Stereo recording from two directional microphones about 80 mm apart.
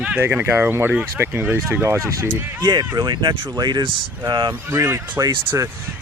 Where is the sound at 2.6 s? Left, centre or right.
Right.